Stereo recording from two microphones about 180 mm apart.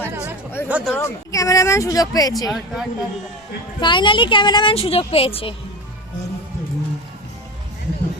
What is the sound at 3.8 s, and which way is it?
A woman's voice, 25° left (ahead or behind).